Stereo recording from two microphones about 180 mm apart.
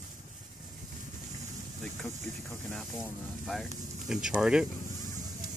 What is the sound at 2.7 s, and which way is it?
Speech, 5° left (ahead or behind).